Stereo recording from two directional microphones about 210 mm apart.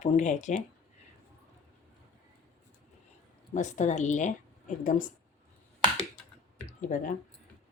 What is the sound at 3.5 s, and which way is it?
Speech, 35° left (ahead or behind).